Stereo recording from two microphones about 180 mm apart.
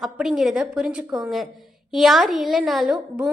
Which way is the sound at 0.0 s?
Centre (ahead or behind).